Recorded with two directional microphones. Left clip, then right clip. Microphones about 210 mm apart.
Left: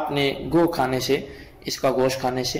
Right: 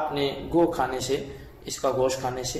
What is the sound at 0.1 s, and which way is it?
A man's voice, 40° left (ahead or behind).